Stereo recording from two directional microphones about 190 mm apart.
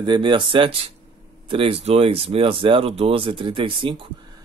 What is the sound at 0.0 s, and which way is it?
Speech, 25° right (ahead or behind).